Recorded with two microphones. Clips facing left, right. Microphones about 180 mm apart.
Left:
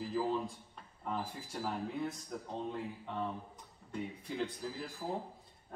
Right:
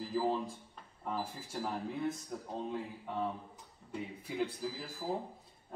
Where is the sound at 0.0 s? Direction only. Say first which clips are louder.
Right 1 dB; centre (ahead or behind).